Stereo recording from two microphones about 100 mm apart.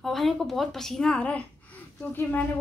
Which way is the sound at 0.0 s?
Centre (ahead or behind).